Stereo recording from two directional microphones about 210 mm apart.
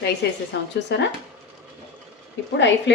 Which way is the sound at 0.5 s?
55° left (ahead or behind).